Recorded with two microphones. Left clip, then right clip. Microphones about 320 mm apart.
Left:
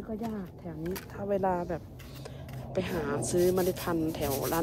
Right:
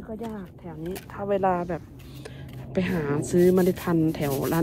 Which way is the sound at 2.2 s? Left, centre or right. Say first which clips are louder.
Right 4 dB; right.